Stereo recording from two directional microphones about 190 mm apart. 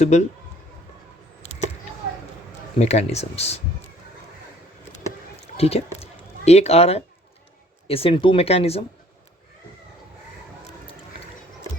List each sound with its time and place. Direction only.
0.0 s speech: 35° left (ahead or behind)
2.7 s speech: 35° left (ahead or behind)
5.5 s speech: 30° left (ahead or behind)